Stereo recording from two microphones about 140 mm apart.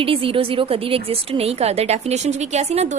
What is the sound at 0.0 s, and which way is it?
Speech, 40° right (ahead or behind).